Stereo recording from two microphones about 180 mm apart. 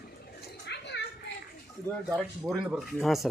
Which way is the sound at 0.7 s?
75° left (ahead or behind).